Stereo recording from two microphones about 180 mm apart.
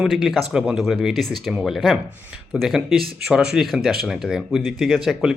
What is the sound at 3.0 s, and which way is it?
Speech, 60° right (ahead or behind).